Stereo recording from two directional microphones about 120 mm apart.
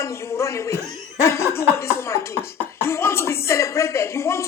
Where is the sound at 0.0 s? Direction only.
25° left (ahead or behind).